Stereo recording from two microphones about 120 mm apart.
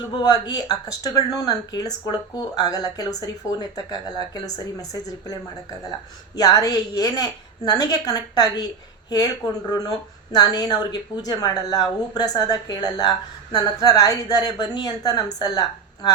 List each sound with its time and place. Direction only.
0.2 s speech: 35° left (ahead or behind)